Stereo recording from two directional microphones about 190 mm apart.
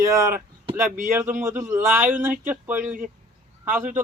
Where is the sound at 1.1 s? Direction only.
15° right (ahead or behind).